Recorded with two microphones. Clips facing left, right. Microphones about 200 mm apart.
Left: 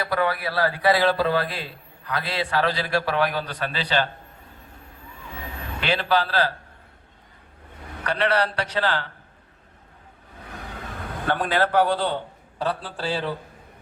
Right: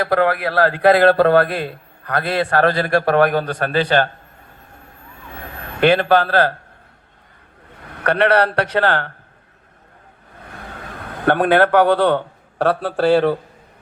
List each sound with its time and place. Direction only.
0.0 s a man's voice: 55° right (ahead or behind)
5.4 s a man's voice: 55° right (ahead or behind)
7.9 s a man's voice: 60° right (ahead or behind)
11.3 s a man's voice: 60° right (ahead or behind)